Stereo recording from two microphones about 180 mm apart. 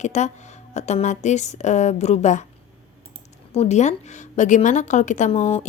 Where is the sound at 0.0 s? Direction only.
40° left (ahead or behind).